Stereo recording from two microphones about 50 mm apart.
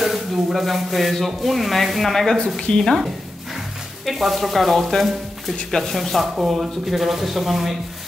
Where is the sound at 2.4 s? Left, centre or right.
Centre.